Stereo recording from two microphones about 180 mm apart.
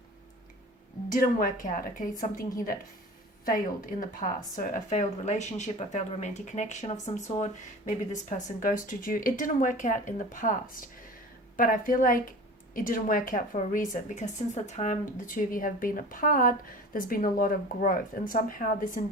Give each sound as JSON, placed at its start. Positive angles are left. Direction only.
{"t": 1.2, "sound": "speech", "side_deg": 50}
{"t": 4.1, "sound": "speech", "side_deg": 45}